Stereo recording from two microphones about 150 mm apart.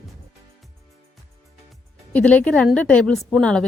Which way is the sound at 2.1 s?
10° left (ahead or behind).